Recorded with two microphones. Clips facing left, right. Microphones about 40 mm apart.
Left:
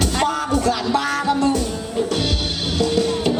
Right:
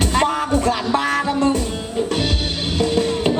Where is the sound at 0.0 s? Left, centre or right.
Right.